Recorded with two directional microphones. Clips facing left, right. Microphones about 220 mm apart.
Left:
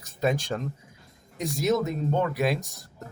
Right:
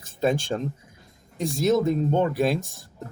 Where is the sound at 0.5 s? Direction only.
25° right (ahead or behind).